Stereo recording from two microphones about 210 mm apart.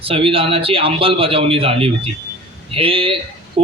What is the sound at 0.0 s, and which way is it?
A man's voice, 25° right (ahead or behind).